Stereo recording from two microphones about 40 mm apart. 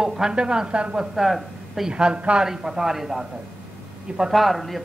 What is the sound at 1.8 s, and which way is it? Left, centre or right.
Speech, right.